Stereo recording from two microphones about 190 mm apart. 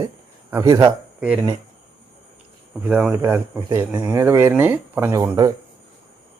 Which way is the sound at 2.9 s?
5° right (ahead or behind).